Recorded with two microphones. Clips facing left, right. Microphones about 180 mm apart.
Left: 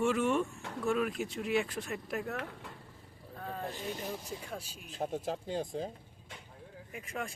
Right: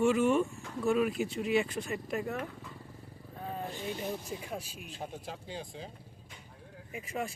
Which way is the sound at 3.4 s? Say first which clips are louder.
Right 2 dB; 5° right (ahead or behind).